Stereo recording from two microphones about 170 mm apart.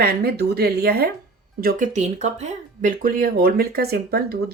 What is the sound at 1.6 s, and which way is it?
Speech, 50° right (ahead or behind).